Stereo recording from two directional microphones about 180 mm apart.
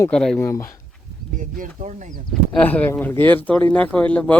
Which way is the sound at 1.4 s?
45° right (ahead or behind).